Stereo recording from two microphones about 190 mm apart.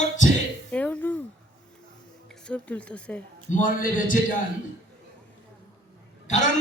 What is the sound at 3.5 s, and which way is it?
Speech, 45° left (ahead or behind).